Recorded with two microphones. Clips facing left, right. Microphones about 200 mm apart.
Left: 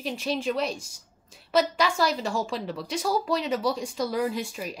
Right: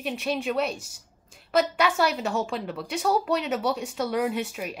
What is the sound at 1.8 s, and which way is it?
Speech, 5° right (ahead or behind).